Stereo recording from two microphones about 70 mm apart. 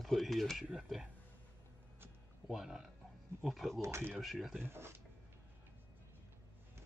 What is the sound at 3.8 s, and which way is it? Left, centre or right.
Speech, right.